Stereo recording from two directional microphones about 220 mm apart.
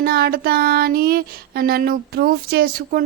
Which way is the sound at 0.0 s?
45° right (ahead or behind).